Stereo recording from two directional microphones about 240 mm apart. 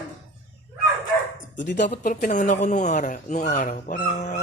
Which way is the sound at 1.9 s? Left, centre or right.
Left.